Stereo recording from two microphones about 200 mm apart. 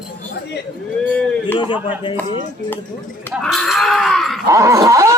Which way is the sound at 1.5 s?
25° left (ahead or behind).